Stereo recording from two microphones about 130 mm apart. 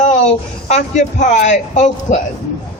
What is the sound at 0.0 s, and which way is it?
Speech, 65° left (ahead or behind).